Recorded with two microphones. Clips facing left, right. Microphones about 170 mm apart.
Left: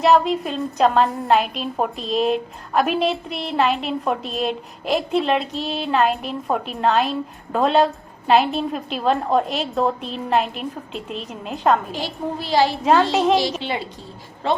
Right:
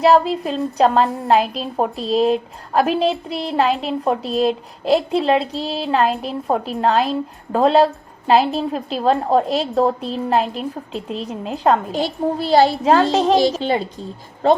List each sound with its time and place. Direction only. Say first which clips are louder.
0.0 s a woman's voice: right 2 dB; 30° right (ahead or behind)